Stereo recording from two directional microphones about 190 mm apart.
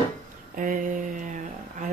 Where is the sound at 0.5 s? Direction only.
45° right (ahead or behind).